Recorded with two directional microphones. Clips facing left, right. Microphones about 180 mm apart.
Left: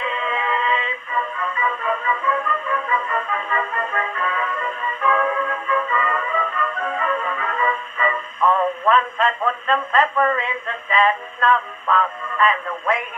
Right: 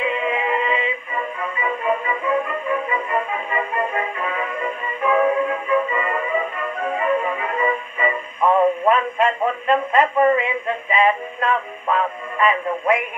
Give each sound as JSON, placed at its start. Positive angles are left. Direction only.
{"t": 0.0, "sound": "synthetic singing", "side_deg": -15}
{"t": 1.6, "sound": "music", "side_deg": -15}
{"t": 10.1, "sound": "a sound", "side_deg": -15}
{"t": 11.9, "sound": "speech", "side_deg": -15}